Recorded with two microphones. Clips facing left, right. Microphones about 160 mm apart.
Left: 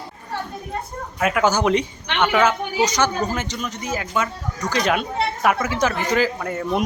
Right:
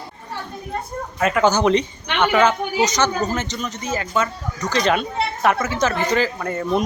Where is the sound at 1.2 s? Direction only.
5° left (ahead or behind).